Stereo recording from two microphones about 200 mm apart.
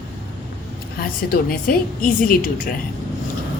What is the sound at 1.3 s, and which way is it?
A woman's voice, 45° left (ahead or behind).